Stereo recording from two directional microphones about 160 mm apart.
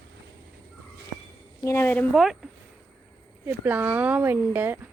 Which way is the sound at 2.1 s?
Centre (ahead or behind).